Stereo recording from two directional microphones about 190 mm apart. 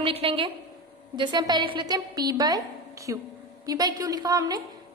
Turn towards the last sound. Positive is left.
turn(degrees=-20)  # may be behind; listen again after turning